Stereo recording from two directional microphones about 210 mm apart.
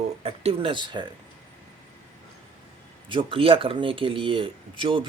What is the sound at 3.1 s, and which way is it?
Speech, 25° right (ahead or behind).